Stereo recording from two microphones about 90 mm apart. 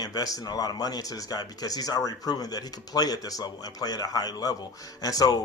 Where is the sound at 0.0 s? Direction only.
45° left (ahead or behind).